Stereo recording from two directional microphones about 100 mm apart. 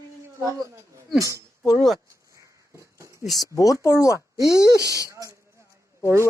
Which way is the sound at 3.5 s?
35° left (ahead or behind).